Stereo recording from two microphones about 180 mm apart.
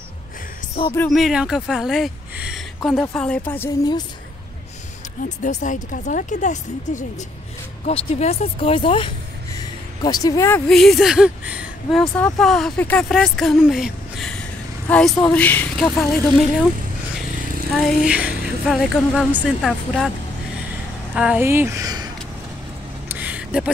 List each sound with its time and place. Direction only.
0.9 s speech: 5° left (ahead or behind)
2.9 s speech: 10° left (ahead or behind)
5.4 s speech: 45° left (ahead or behind); by 10.6 s 15° left (ahead or behind)
10.7 s a woman's voice: centre (ahead or behind)
17.7 s a woman's voice: centre (ahead or behind)
21.1 s speech: 5° right (ahead or behind)
23.0 s a sound: 10° right (ahead or behind)